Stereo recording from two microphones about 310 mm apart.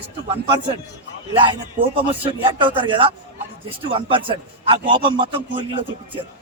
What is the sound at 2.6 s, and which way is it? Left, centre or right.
A man's voice, centre.